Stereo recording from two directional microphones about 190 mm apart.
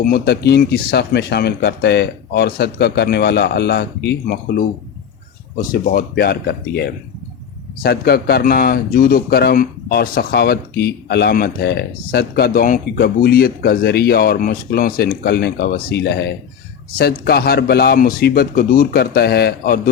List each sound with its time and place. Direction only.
0.0 s a man's voice: 55° left (ahead or behind)